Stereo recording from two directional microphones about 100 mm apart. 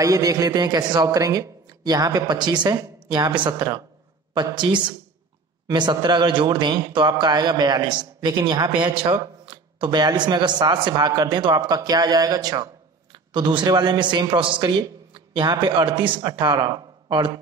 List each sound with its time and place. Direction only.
0.0 s a man's voice: 35° right (ahead or behind)
13.1 s a man's voice: 50° right (ahead or behind)
16.2 s speech: 40° right (ahead or behind)